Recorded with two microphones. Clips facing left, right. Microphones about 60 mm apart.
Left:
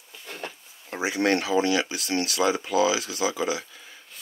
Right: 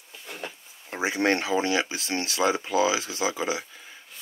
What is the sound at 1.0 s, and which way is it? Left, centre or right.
Speech, right.